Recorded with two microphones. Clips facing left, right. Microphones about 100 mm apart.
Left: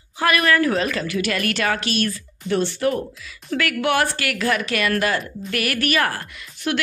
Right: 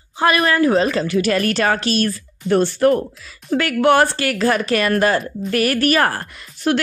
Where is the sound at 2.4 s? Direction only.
45° right (ahead or behind).